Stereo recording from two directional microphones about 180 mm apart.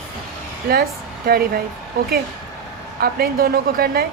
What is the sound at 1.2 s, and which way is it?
Speech, 55° right (ahead or behind).